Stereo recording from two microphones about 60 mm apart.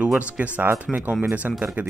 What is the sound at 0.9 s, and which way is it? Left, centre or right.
Speech, centre.